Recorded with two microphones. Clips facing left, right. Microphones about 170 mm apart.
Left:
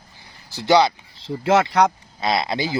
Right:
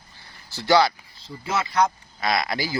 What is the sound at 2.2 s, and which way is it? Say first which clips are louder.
Speech: left 3 dB; 25° left (ahead or behind).